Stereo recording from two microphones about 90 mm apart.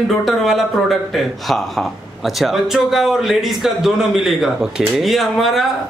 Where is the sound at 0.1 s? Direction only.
Centre (ahead or behind).